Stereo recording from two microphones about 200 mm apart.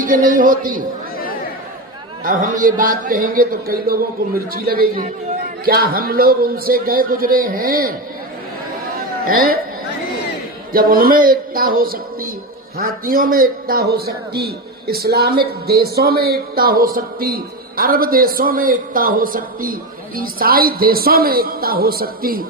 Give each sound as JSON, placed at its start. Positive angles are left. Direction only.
{"t": 0.0, "sound": "a man's voice", "side_deg": -45}
{"t": 2.2, "sound": "a man's voice", "side_deg": -40}
{"t": 9.2, "sound": "a man's voice", "side_deg": -45}
{"t": 10.7, "sound": "a man's voice", "side_deg": -45}